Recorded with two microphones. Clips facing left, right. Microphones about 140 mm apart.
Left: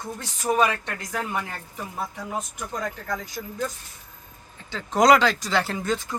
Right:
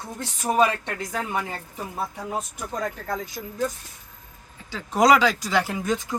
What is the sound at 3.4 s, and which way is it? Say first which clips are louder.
Speech: left 1 dB; 25° right (ahead or behind).